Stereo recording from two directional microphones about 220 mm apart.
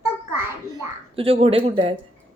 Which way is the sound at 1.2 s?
25° right (ahead or behind).